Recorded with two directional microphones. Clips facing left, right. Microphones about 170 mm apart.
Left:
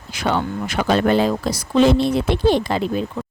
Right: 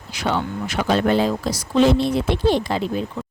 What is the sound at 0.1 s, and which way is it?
Speech, 50° left (ahead or behind).